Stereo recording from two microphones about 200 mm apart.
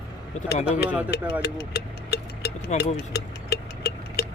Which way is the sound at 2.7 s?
35° left (ahead or behind).